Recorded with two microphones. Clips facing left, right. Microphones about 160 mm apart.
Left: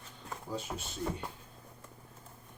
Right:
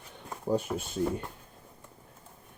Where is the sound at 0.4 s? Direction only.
55° right (ahead or behind).